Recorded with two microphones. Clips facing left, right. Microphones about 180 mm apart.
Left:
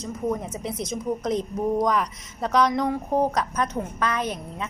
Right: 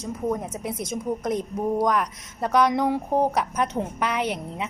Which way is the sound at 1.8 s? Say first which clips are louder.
Even; centre (ahead or behind).